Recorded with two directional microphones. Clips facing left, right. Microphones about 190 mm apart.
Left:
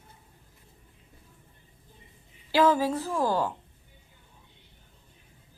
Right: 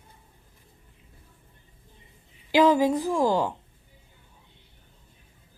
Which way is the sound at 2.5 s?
15° right (ahead or behind).